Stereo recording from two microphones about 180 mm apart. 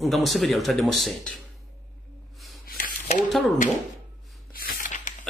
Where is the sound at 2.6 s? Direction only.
50° left (ahead or behind).